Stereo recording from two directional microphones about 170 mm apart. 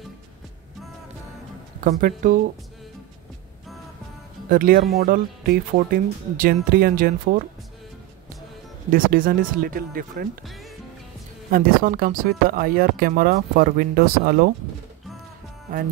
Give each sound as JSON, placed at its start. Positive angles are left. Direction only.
{"t": 1.8, "sound": "speech", "side_deg": -55}
{"t": 4.5, "sound": "speech", "side_deg": -55}
{"t": 8.9, "sound": "speech", "side_deg": -55}
{"t": 10.4, "sound": "music", "side_deg": 0}
{"t": 11.5, "sound": "speech", "side_deg": -60}